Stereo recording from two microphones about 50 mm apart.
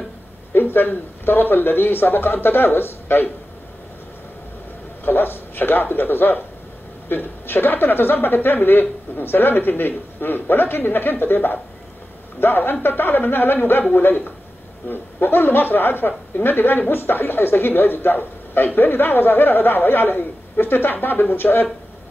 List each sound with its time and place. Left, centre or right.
0.5 s a woman's voice: left
5.0 s a man's voice: left
14.9 s a woman's voice: left